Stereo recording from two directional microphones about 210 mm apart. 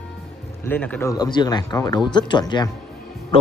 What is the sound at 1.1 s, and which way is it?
Speech, 20° left (ahead or behind).